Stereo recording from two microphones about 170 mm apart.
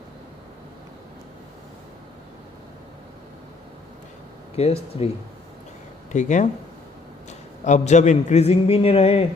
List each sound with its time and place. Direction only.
4.5 s speech: 35° left (ahead or behind)
6.1 s a man's voice: 45° left (ahead or behind)